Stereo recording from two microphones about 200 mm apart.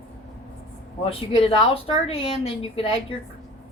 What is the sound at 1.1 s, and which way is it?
A woman's voice, 30° left (ahead or behind).